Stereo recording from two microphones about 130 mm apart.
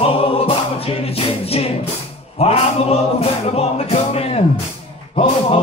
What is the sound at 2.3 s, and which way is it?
Music, 50° left (ahead or behind).